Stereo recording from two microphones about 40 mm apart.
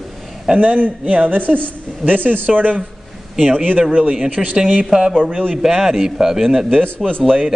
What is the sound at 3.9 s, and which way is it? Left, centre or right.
Speech, right.